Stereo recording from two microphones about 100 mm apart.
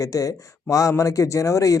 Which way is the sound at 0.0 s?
35° left (ahead or behind).